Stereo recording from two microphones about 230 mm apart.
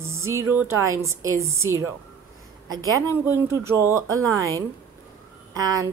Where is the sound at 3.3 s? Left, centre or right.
Centre.